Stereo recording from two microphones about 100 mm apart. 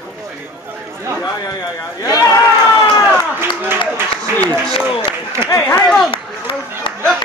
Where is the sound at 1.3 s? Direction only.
35° left (ahead or behind).